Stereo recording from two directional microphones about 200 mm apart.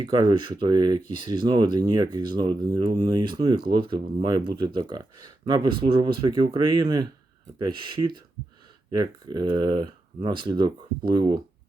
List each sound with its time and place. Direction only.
0.0 s speech: 20° right (ahead or behind)